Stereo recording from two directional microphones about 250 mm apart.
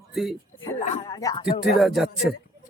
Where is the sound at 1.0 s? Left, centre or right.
Centre.